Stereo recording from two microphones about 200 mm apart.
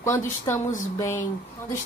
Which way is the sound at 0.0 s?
15° left (ahead or behind).